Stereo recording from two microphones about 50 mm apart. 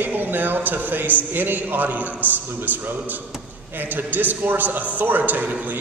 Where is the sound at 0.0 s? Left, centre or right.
Right.